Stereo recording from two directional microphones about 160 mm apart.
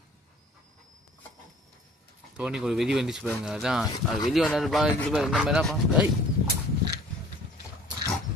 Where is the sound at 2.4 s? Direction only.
5° right (ahead or behind).